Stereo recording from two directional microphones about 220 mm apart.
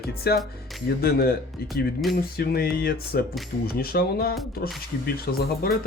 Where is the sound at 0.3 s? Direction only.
45° left (ahead or behind).